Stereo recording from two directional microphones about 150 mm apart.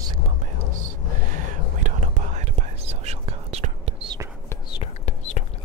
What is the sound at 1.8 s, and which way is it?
Whispering, 55° right (ahead or behind).